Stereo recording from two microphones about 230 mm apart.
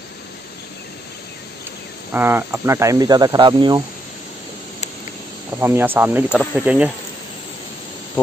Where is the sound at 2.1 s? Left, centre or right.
Centre.